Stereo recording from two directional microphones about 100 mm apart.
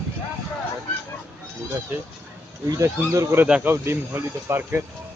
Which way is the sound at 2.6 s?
35° right (ahead or behind).